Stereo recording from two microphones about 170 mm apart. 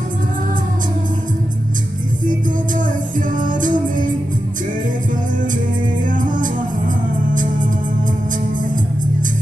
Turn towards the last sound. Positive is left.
turn(degrees=-50)  # may be behind; listen again after turning